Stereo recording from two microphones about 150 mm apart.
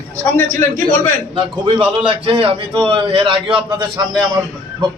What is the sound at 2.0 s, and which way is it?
A man's voice, 35° right (ahead or behind).